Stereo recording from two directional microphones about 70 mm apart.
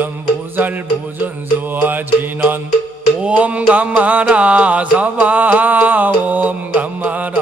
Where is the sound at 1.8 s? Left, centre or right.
Right.